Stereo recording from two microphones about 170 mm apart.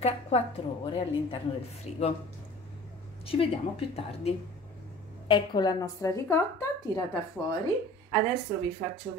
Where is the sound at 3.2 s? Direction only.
35° left (ahead or behind).